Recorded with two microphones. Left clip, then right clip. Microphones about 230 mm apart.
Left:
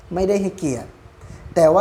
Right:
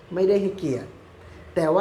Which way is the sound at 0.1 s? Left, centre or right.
Left.